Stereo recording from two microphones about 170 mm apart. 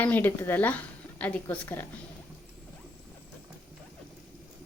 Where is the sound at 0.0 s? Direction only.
10° left (ahead or behind).